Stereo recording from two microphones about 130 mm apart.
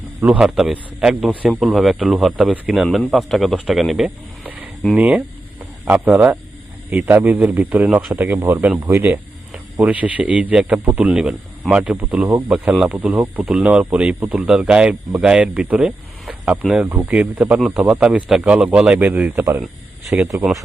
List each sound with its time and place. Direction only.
0.3 s a man's voice: 5° right (ahead or behind)